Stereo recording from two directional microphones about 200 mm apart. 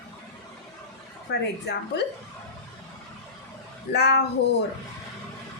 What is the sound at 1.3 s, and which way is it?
Speech, 55° left (ahead or behind).